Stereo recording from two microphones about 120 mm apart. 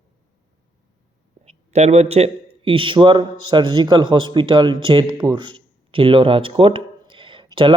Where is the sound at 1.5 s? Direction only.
65° right (ahead or behind).